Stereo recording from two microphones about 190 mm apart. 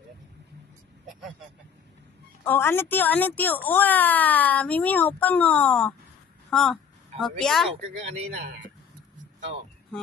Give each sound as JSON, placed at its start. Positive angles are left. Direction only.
{"t": 2.4, "sound": "speech", "side_deg": 10}